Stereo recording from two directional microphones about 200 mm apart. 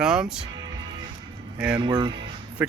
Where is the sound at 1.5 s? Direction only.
5° right (ahead or behind).